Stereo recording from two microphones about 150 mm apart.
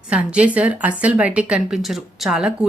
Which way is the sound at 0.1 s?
10° right (ahead or behind).